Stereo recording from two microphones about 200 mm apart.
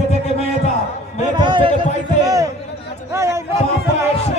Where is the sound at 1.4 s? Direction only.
25° right (ahead or behind).